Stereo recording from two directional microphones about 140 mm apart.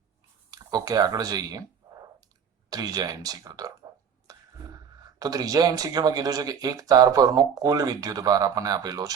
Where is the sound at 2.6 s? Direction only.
25° right (ahead or behind).